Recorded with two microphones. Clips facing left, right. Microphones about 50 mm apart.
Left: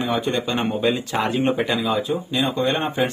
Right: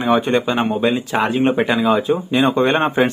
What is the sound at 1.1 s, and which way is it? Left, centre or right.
Speech, right.